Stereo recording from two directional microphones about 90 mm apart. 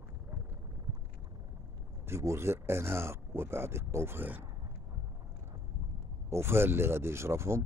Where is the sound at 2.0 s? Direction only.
30° right (ahead or behind).